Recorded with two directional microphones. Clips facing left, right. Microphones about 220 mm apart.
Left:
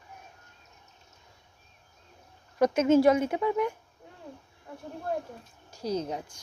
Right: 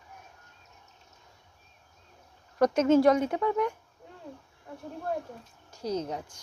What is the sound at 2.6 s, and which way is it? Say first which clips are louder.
A woman's voice: even; 5° left (ahead or behind).